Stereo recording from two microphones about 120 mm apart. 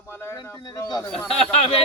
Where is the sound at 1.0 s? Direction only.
5° left (ahead or behind).